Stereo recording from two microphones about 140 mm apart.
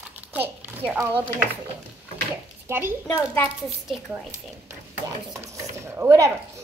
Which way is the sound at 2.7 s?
15° right (ahead or behind).